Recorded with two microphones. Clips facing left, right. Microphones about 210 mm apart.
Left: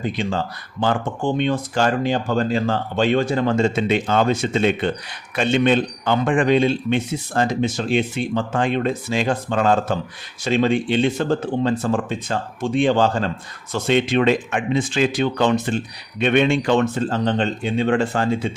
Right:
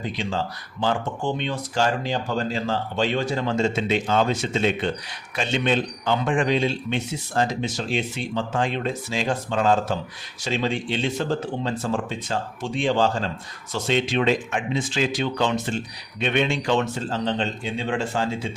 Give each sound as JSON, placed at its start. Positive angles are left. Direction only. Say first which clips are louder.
{"t": 0.0, "sound": "speech", "louder": "left 4 dB", "side_deg": 55}